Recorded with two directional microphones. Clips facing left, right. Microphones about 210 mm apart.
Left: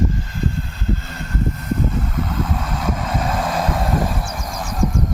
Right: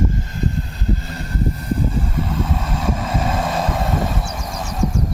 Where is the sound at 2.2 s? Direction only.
5° right (ahead or behind).